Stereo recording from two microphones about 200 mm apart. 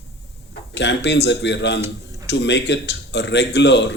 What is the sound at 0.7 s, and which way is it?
Speech, 60° left (ahead or behind).